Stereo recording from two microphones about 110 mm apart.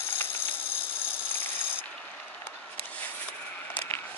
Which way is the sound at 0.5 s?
10° right (ahead or behind).